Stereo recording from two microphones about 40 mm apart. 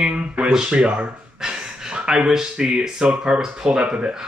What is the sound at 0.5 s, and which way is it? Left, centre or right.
Speech, centre.